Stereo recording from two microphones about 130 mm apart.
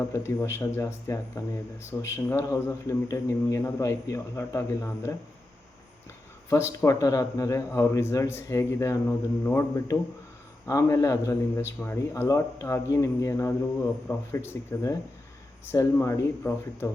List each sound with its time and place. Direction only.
0.1 s speech: 20° left (ahead or behind)
6.5 s speech: 20° left (ahead or behind)